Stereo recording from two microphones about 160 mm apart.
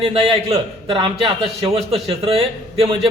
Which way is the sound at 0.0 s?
35° right (ahead or behind).